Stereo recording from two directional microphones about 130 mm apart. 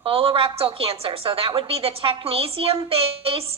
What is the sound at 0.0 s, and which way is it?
A woman's voice, 45° right (ahead or behind).